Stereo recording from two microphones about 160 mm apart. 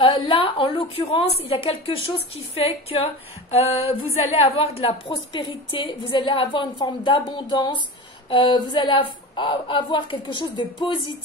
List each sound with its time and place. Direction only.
0.0 s a woman's voice: 35° left (ahead or behind)